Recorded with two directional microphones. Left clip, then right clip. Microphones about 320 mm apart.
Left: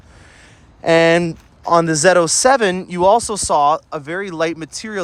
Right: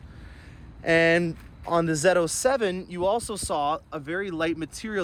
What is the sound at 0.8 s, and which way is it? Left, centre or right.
Speech, centre.